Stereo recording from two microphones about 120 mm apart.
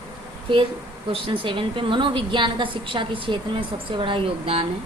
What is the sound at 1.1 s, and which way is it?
A woman's voice, 45° right (ahead or behind).